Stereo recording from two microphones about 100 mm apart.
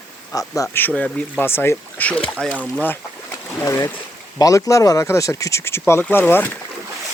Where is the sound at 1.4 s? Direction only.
20° left (ahead or behind).